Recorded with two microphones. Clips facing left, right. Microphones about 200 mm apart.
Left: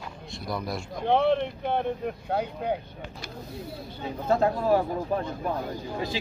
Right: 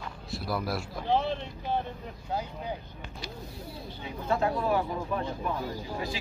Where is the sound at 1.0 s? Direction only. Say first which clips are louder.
Left 7 dB; 60° left (ahead or behind).